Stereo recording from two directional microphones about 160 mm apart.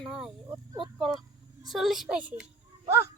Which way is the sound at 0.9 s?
Centre (ahead or behind).